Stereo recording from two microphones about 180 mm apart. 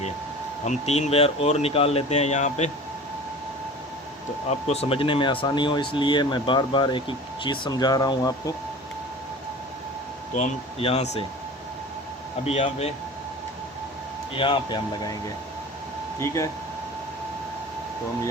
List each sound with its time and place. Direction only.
0.6 s speech: 40° left (ahead or behind)
4.4 s speech: 35° left (ahead or behind); by 8.5 s 20° left (ahead or behind)
10.3 s speech: 35° left (ahead or behind)
12.5 s speech: 35° left (ahead or behind)
14.3 s speech: 25° left (ahead or behind)
16.2 s speech: 15° left (ahead or behind)